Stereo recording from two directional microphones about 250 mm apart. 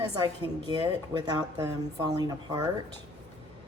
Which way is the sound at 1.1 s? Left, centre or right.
Centre.